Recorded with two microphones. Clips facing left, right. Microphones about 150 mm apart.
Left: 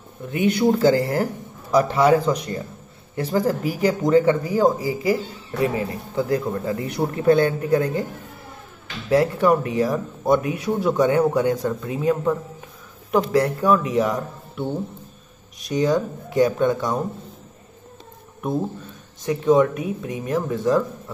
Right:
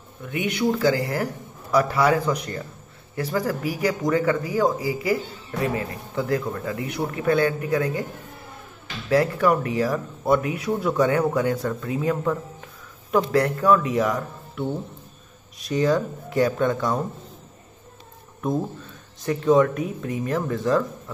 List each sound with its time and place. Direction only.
0.2 s speech: 35° left (ahead or behind); by 6.8 s 20° left (ahead or behind)
6.8 s speech: 35° left (ahead or behind)
9.1 s speech: 25° left (ahead or behind)
15.7 s speech: 20° left (ahead or behind)
19.2 s speech: 10° left (ahead or behind)